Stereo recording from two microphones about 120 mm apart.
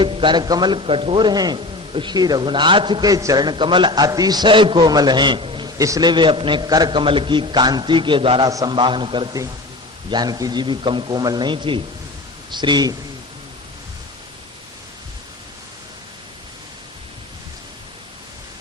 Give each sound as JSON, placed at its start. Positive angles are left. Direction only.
{"t": 0.0, "sound": "a man's voice", "side_deg": -45}
{"t": 5.7, "sound": "a man's voice", "side_deg": -30}
{"t": 8.4, "sound": "a man's voice", "side_deg": -30}
{"t": 8.7, "sound": "a man's voice", "side_deg": -45}